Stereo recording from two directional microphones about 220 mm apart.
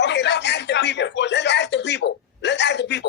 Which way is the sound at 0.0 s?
50° left (ahead or behind).